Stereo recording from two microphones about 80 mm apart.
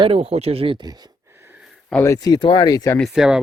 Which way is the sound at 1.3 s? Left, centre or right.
Right.